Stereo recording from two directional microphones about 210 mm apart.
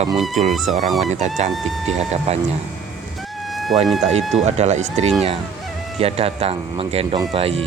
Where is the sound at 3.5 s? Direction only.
Centre (ahead or behind).